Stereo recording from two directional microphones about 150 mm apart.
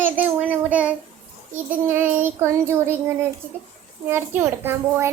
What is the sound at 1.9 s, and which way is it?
A child's voice, 15° right (ahead or behind).